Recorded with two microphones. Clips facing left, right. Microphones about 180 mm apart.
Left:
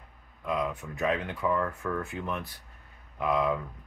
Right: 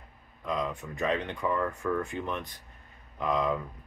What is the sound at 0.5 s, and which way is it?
Speech, 5° left (ahead or behind).